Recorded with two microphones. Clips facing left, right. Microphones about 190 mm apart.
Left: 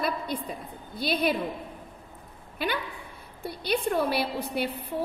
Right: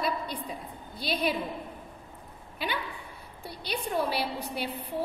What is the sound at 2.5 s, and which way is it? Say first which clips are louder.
A woman's voice: left 3 dB; 50° left (ahead or behind).